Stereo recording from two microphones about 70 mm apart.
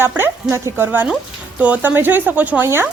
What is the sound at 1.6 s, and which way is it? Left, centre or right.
A woman's voice, right.